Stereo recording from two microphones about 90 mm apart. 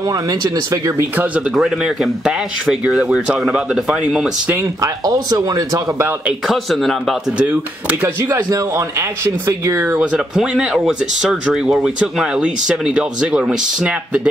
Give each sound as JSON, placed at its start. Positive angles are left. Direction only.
{"t": 0.1, "sound": "speech", "side_deg": -45}
{"t": 1.1, "sound": "speech", "side_deg": -15}
{"t": 1.5, "sound": "speech", "side_deg": -5}
{"t": 4.8, "sound": "speech", "side_deg": -45}
{"t": 6.4, "sound": "speech", "side_deg": 0}
{"t": 8.3, "sound": "speech", "side_deg": -35}
{"t": 9.9, "sound": "speech", "side_deg": -10}